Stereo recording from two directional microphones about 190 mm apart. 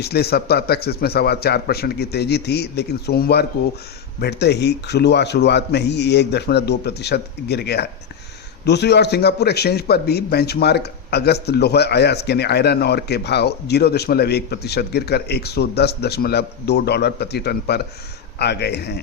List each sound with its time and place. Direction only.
0.0 s a man's voice: 55° left (ahead or behind)